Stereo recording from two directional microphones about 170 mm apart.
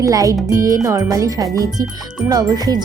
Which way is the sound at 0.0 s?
20° right (ahead or behind).